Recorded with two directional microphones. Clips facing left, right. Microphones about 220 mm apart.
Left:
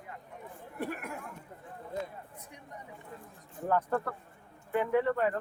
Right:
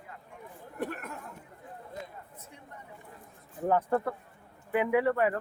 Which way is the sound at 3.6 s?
20° right (ahead or behind).